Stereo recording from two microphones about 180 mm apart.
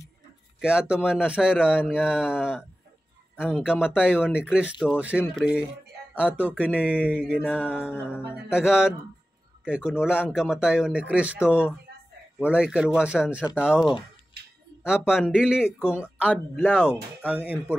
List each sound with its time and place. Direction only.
0.6 s a man's voice: 5° right (ahead or behind)
3.6 s a man's voice: 5° right (ahead or behind)
6.8 s a man's voice: 5° right (ahead or behind)
13.7 s speech: 25° left (ahead or behind)
14.8 s a man's voice: 5° right (ahead or behind)